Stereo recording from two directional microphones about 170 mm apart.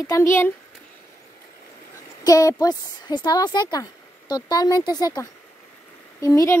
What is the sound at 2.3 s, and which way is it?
A woman's voice, 20° left (ahead or behind).